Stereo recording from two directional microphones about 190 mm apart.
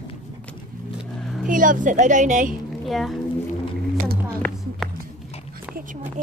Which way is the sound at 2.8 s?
Centre (ahead or behind).